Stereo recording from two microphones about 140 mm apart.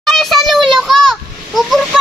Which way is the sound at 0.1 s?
Centre (ahead or behind).